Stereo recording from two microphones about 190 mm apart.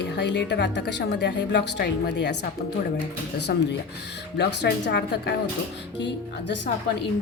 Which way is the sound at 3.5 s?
60° left (ahead or behind).